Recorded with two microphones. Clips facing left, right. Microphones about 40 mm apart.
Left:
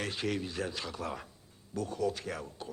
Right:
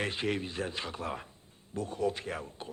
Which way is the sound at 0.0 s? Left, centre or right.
Right.